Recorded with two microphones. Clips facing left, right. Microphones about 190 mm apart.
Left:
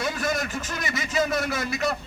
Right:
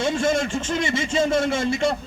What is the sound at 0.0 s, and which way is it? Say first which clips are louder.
A man's voice: right 6 dB; 25° right (ahead or behind).